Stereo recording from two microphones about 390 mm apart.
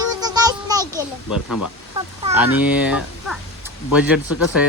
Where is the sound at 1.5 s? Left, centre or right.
Left.